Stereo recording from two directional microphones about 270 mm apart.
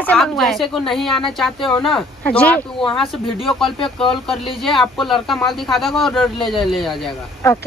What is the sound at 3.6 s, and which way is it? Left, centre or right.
Speech, centre.